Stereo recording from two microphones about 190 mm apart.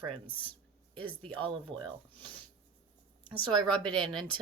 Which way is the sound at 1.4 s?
25° right (ahead or behind).